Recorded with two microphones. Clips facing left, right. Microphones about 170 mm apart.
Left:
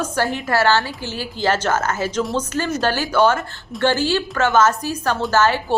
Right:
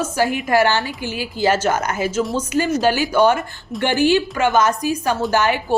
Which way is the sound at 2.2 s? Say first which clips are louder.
Right 1 dB; centre (ahead or behind).